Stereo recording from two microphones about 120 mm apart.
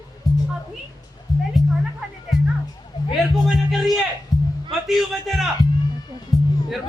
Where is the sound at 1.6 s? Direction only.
30° left (ahead or behind).